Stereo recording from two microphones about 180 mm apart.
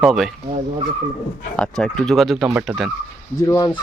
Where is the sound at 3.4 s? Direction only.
20° left (ahead or behind).